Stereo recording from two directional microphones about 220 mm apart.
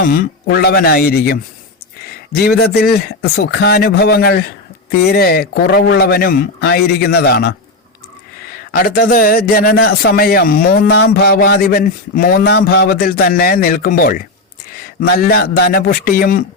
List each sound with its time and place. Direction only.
0.1 s a man's voice: 40° left (ahead or behind)
8.7 s a man's voice: 40° left (ahead or behind)